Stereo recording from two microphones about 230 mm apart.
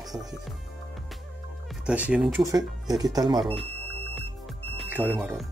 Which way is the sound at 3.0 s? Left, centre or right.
Centre.